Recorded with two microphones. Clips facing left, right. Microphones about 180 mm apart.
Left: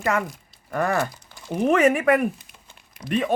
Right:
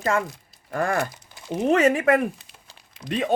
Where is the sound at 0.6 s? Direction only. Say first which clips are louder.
Left 1 dB; 50° right (ahead or behind).